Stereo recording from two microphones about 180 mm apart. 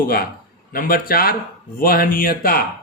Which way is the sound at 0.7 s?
55° left (ahead or behind).